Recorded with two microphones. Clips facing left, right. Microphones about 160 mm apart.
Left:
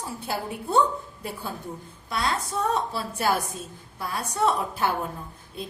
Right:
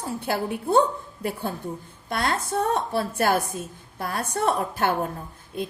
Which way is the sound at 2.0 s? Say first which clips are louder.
Right 2 dB; 55° right (ahead or behind).